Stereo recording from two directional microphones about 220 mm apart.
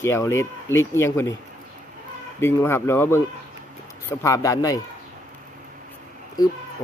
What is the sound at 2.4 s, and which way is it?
Speech, 10° left (ahead or behind).